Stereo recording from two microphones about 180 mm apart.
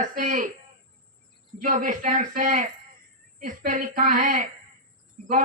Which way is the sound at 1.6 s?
45° right (ahead or behind).